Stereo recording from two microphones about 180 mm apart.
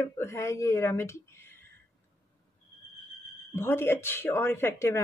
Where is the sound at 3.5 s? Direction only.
15° left (ahead or behind).